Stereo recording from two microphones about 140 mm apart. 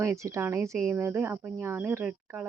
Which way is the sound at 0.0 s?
20° right (ahead or behind).